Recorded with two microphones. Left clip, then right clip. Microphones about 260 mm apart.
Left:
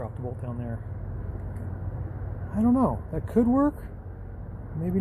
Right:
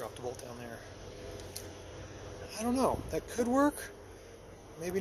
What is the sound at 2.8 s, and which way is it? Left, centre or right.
Speech, centre.